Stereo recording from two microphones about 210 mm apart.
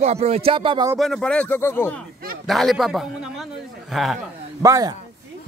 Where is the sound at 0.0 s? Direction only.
30° right (ahead or behind).